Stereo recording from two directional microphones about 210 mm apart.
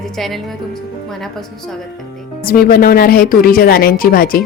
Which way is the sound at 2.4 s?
45° left (ahead or behind).